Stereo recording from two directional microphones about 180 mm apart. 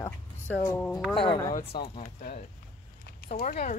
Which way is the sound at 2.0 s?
50° left (ahead or behind).